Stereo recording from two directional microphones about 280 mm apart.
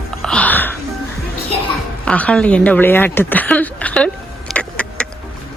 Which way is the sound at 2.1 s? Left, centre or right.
Centre.